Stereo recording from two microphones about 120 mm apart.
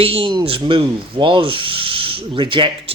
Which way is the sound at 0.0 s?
50° right (ahead or behind).